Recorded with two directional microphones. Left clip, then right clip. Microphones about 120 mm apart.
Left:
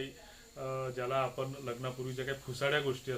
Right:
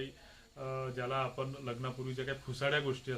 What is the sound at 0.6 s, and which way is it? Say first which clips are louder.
Speech: left 2 dB; 15° right (ahead or behind).